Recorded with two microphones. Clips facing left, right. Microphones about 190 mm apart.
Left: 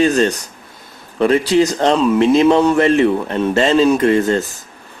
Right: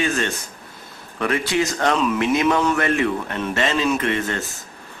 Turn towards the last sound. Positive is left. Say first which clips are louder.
# left 9 dB
turn(degrees=35)  # may be behind; listen again after turning